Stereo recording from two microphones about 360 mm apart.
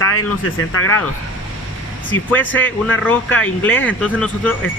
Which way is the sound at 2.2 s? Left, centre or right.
Centre.